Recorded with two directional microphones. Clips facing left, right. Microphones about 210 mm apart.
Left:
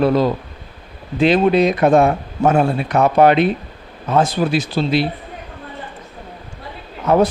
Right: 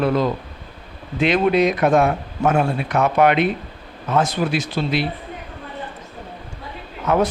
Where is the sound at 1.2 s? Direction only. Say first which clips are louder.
Left 3 dB; 30° left (ahead or behind).